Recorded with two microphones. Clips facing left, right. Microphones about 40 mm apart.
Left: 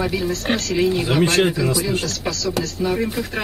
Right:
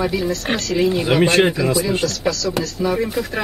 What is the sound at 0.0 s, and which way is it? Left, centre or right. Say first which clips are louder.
Speech: right 2 dB; centre.